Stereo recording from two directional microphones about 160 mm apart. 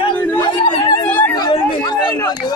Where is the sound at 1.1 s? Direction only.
10° left (ahead or behind).